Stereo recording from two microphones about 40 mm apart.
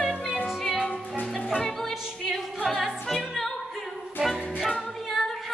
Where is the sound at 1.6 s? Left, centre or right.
Centre.